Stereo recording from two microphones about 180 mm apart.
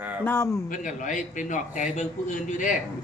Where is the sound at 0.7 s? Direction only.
45° left (ahead or behind).